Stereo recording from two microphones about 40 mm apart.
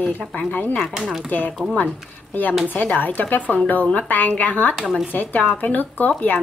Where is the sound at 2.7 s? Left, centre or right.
Left.